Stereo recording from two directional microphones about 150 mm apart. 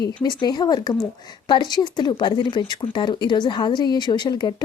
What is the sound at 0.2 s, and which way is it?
A woman's voice, 30° left (ahead or behind).